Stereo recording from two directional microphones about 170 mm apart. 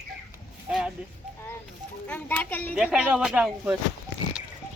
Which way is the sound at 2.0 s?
10° left (ahead or behind).